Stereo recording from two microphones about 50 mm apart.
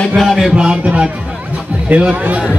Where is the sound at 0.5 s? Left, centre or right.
Right.